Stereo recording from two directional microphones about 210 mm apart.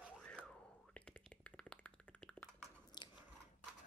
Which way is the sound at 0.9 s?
5° left (ahead or behind).